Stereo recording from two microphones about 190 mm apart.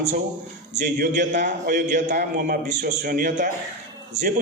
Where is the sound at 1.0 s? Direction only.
40° right (ahead or behind).